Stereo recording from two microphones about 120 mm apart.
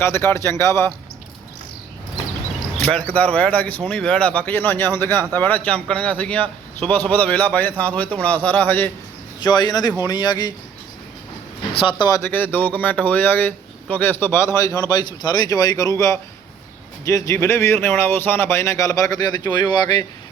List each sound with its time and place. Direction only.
0.0 s speech: 20° left (ahead or behind)
2.8 s a man's voice: 10° left (ahead or behind)
9.4 s a man's voice: 35° left (ahead or behind)
11.8 s a man's voice: 40° left (ahead or behind)
12.2 s a man's voice: 15° left (ahead or behind); by 20.1 s 35° left (ahead or behind)